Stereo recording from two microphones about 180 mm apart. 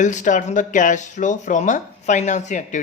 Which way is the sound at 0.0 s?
45° left (ahead or behind).